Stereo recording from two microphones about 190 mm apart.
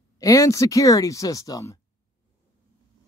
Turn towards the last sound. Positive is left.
turn(degrees=15)  # may be behind; listen again after turning